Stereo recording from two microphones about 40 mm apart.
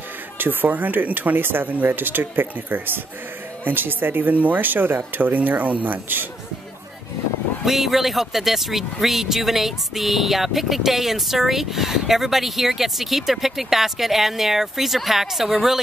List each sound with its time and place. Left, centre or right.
0.4 s speech: right
7.6 s speech: centre